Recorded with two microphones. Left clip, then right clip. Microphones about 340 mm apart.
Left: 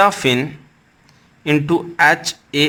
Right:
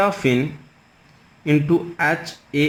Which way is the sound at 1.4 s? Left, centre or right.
Left.